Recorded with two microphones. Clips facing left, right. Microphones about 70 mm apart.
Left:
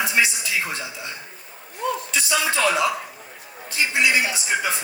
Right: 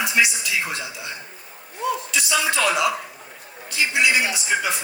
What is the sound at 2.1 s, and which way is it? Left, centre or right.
Speech, left.